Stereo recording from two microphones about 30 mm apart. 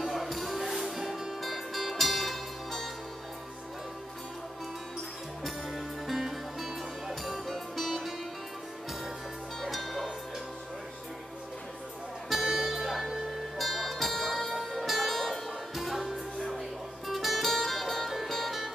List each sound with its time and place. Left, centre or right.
0.0 s music: centre
5.4 s music: centre
9.7 s music: centre
12.3 s music: centre